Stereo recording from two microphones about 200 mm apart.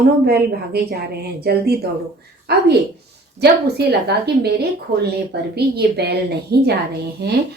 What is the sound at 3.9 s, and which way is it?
Speech, 55° right (ahead or behind).